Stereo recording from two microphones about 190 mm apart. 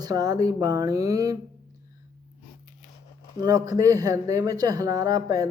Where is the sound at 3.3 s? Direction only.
20° right (ahead or behind).